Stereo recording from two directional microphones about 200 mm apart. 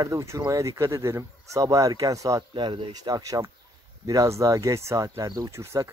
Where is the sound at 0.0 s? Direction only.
15° right (ahead or behind).